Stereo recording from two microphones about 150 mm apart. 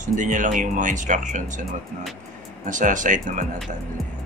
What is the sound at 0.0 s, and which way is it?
Speech, 60° right (ahead or behind).